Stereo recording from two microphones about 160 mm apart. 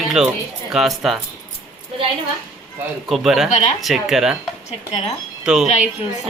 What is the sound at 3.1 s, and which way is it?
Speech, centre (ahead or behind).